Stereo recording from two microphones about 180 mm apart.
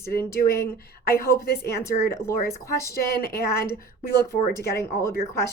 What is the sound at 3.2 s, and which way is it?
Speech, 60° left (ahead or behind).